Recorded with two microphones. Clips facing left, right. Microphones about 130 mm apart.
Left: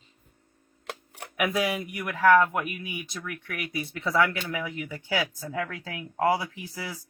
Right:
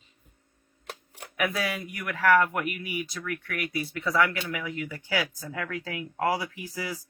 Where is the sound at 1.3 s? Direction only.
20° left (ahead or behind).